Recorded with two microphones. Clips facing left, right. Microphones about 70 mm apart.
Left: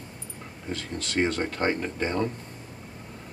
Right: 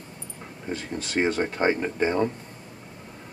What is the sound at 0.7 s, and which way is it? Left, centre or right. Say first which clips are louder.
Speech: right 2 dB; centre.